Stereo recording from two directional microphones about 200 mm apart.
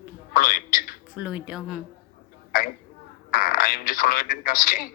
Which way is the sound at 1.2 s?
5° right (ahead or behind).